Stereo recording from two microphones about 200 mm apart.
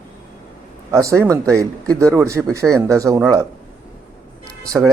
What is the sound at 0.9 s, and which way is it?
Speech, 15° right (ahead or behind).